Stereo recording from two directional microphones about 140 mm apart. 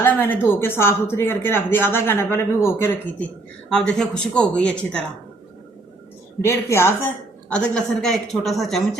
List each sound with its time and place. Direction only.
0.0 s speech: 15° left (ahead or behind)
3.7 s speech: 5° left (ahead or behind)
6.4 s a woman's voice: 20° left (ahead or behind)
7.5 s speech: 5° left (ahead or behind)